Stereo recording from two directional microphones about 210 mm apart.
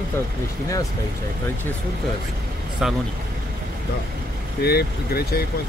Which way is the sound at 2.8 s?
Centre (ahead or behind).